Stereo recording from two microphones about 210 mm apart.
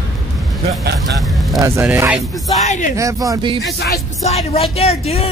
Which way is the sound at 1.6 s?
10° right (ahead or behind).